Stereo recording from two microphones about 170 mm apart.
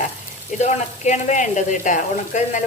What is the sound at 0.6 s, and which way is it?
Speech, 45° left (ahead or behind).